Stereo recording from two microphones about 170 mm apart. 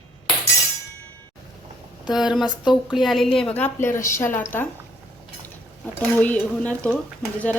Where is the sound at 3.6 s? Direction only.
15° left (ahead or behind).